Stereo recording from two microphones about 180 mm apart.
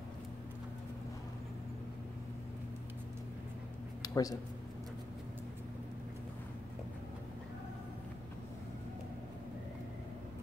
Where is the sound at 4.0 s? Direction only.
20° left (ahead or behind).